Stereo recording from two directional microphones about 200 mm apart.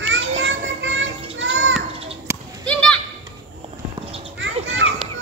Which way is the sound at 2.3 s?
10° right (ahead or behind).